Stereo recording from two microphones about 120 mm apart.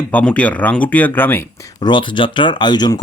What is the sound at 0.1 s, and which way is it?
Speech, 10° left (ahead or behind).